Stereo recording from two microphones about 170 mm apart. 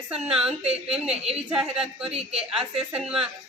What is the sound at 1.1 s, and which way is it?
Speech, 40° right (ahead or behind).